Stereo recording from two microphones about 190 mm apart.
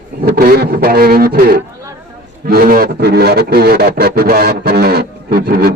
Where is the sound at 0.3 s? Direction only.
55° right (ahead or behind).